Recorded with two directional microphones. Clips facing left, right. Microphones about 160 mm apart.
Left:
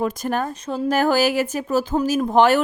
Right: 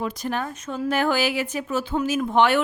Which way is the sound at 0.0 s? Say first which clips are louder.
Left 4 dB; 45° left (ahead or behind).